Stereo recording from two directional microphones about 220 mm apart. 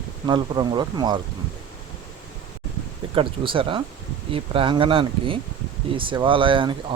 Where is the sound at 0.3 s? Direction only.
20° right (ahead or behind).